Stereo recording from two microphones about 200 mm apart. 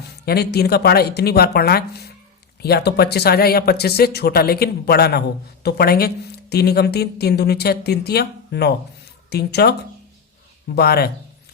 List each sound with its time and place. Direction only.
0.3 s a woman's voice: 50° left (ahead or behind)
10.8 s a woman's voice: 50° left (ahead or behind)